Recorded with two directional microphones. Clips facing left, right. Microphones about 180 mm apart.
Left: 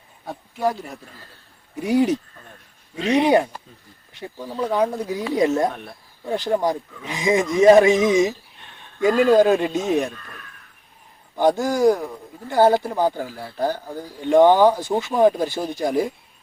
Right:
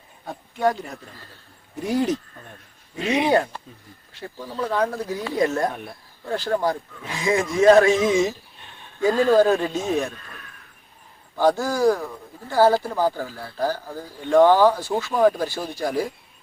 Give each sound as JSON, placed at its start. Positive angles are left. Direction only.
{"t": 0.3, "sound": "speech", "side_deg": 5}
{"t": 3.2, "sound": "a man's voice", "side_deg": 15}
{"t": 11.3, "sound": "speech", "side_deg": 20}